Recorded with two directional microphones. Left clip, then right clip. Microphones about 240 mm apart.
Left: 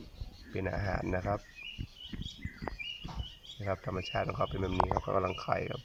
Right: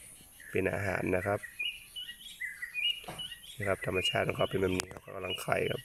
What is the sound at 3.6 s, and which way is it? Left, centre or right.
Speech, right.